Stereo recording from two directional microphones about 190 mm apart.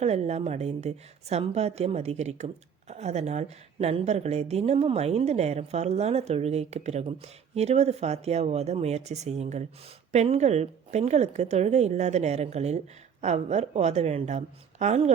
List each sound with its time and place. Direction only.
0.0 s a woman's voice: 35° right (ahead or behind)